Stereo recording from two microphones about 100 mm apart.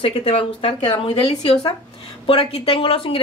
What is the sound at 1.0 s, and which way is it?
Speech, 85° left.